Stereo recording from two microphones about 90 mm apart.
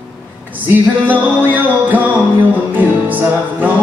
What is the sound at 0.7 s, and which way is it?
Music, 20° right (ahead or behind).